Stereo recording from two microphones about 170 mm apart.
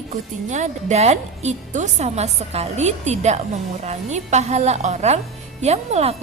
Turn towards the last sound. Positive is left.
turn(degrees=-40)  # may be behind; listen again after turning